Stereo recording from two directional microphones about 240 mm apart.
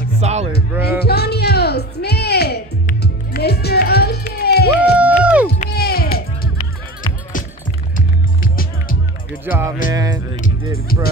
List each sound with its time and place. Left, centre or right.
0.2 s music: right
0.8 s music: left
5.0 s music: centre
5.5 s music: left
7.9 s music: left
9.4 s music: centre
10.4 s music: left